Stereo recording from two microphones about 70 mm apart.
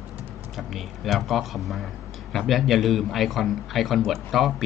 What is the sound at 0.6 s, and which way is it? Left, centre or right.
Speech, centre.